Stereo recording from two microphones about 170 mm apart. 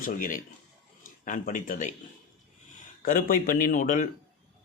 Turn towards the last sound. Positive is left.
turn(degrees=50)  # may be behind; listen again after turning